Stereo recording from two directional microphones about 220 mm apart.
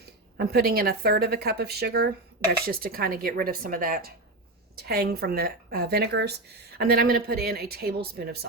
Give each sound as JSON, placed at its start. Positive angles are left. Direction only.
{"t": 0.0, "sound": "speech", "side_deg": -45}